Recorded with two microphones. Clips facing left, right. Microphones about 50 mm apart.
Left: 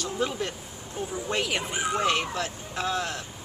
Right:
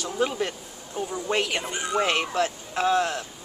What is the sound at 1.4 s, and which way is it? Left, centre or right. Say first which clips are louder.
Speech: right 1 dB; centre.